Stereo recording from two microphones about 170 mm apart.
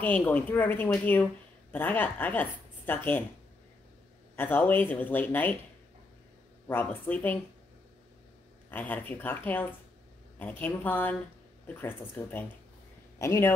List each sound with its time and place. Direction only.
0.0 s a woman's voice: 10° left (ahead or behind)
4.4 s speech: 10° left (ahead or behind)
6.7 s speech: 10° left (ahead or behind)
8.6 s speech: 10° left (ahead or behind)